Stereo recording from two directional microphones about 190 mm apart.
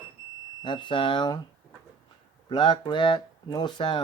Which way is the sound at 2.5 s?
25° left (ahead or behind).